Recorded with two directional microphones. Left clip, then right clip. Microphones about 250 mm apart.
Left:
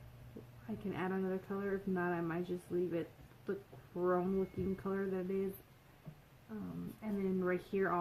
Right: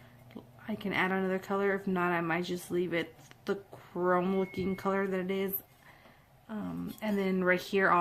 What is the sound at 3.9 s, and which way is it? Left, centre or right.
Speech, right.